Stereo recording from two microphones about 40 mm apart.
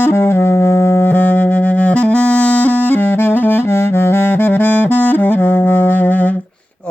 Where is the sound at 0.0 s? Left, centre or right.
Left.